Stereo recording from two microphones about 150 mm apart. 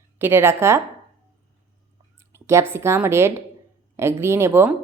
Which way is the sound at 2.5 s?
15° right (ahead or behind).